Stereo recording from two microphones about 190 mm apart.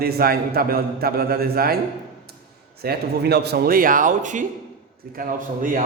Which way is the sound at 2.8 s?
55° right (ahead or behind).